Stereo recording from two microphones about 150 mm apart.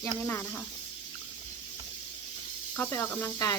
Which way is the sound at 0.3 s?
15° left (ahead or behind).